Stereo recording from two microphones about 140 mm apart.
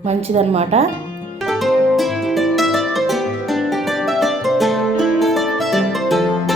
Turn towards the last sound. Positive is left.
turn(degrees=0)  # may be behind; listen again after turning